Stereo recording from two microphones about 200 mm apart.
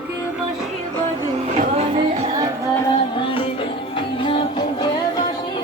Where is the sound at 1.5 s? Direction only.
35° right (ahead or behind).